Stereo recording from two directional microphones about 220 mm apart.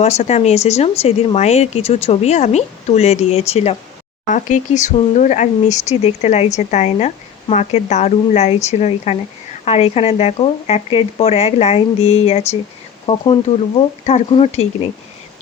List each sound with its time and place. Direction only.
0.0 s speech: 30° left (ahead or behind)
11.9 s speech: 70° left (ahead or behind)
12.2 s speech: 25° left (ahead or behind)